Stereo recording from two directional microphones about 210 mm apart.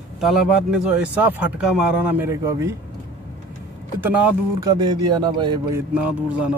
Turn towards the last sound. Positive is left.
turn(degrees=-5)  # may be behind; listen again after turning